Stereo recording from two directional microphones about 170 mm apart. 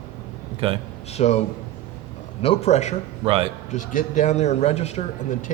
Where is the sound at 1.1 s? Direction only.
40° left (ahead or behind).